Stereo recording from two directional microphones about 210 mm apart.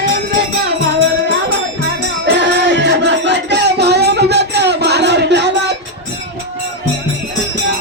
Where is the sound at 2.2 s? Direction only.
55° right (ahead or behind).